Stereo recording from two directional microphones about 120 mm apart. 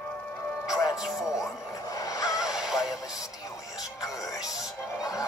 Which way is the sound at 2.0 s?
30° left (ahead or behind).